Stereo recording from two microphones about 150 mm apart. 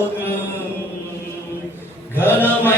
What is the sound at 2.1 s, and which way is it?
Mantra, 15° left (ahead or behind).